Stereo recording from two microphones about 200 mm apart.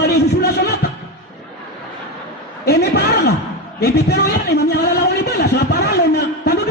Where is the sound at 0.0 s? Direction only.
55° left (ahead or behind).